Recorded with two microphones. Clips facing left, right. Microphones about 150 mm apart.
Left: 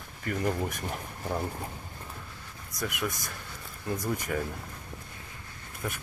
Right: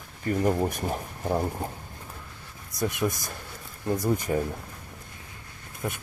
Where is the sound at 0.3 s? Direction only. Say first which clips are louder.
Right 5 dB; 35° right (ahead or behind).